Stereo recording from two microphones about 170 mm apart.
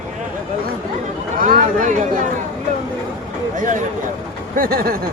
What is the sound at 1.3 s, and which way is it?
Speech, 50° right (ahead or behind).